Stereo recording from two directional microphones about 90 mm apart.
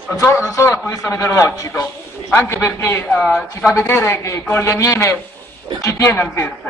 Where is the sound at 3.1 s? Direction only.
10° left (ahead or behind).